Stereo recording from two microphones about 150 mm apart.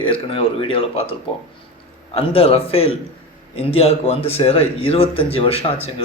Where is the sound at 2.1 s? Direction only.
40° left (ahead or behind).